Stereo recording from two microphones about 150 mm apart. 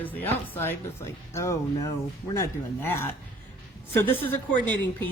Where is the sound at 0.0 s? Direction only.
15° left (ahead or behind).